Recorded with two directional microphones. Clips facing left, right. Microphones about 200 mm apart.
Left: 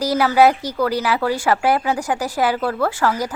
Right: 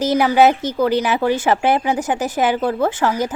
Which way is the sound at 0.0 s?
20° right (ahead or behind).